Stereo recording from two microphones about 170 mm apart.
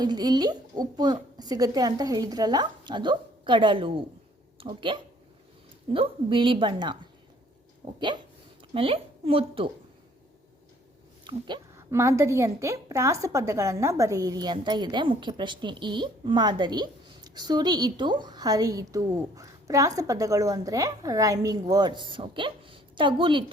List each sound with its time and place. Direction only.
0.0 s a woman's voice: 25° right (ahead or behind)
11.3 s a woman's voice: 25° right (ahead or behind)